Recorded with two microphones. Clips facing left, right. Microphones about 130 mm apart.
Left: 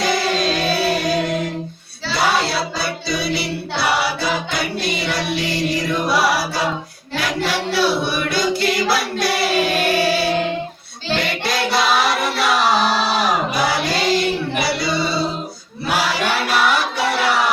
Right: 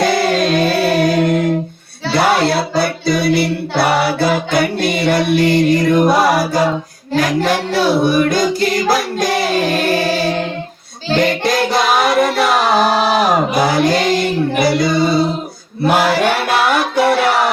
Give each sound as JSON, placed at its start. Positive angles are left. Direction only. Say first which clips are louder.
{"t": 0.0, "sound": "music", "louder": "right 5 dB", "side_deg": -55}
{"t": 12.7, "sound": "chant", "louder": "right 5 dB", "side_deg": -45}
{"t": 15.8, "sound": "a sound", "louder": "right 7 dB", "side_deg": -50}